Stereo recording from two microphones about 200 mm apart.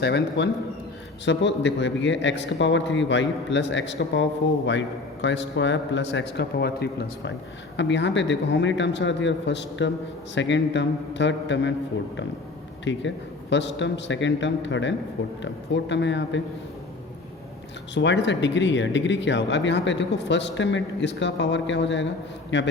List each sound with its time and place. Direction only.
0.0 s a man's voice: 60° left (ahead or behind)
12.8 s a man's voice: 65° left (ahead or behind)
17.9 s a man's voice: 65° left (ahead or behind)